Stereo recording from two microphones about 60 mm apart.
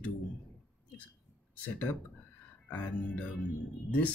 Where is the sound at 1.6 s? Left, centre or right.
Left.